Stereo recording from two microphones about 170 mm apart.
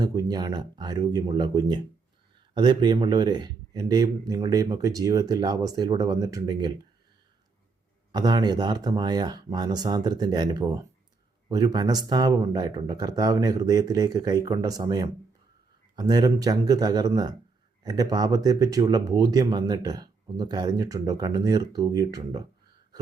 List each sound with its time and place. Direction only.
0.0 s speech: 20° right (ahead or behind)
8.1 s speech: 25° right (ahead or behind)